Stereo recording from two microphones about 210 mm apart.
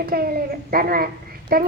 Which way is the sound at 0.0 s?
45° right (ahead or behind).